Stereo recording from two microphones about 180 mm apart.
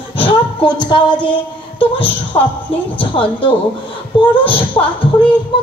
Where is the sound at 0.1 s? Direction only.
30° left (ahead or behind).